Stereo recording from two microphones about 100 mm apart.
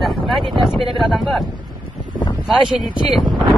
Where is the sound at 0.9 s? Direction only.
Centre (ahead or behind).